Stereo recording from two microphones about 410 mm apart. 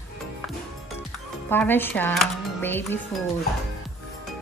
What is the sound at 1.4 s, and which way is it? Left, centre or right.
Speech, centre.